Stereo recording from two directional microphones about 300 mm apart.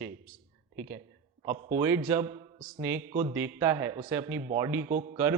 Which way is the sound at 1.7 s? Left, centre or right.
Centre.